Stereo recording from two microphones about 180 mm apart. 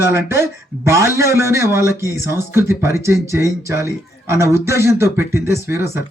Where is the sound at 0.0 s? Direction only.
15° right (ahead or behind).